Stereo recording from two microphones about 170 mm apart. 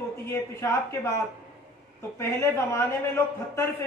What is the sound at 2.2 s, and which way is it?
Speech, 15° left (ahead or behind).